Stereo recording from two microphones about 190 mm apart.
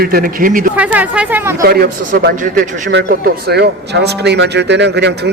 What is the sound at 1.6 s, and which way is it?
A man's voice, 55° right (ahead or behind).